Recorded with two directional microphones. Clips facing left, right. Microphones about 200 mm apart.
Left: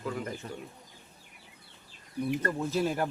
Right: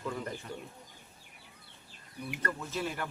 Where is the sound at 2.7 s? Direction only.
40° left (ahead or behind).